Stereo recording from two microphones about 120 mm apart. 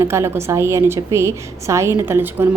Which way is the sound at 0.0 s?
20° right (ahead or behind).